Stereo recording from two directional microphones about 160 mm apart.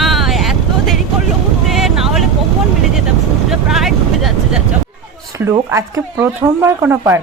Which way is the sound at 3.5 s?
Centre (ahead or behind).